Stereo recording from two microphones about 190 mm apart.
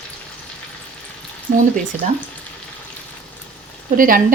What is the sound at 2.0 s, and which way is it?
Speech, 40° right (ahead or behind).